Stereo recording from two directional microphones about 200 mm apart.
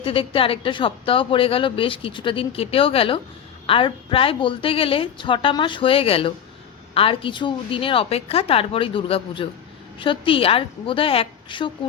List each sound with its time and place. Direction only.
0.0 s speech: 25° left (ahead or behind)